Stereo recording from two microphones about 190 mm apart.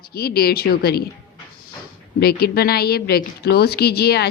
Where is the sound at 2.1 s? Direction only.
55° left (ahead or behind).